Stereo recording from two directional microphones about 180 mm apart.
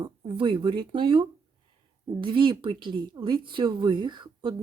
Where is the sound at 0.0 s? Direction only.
25° right (ahead or behind).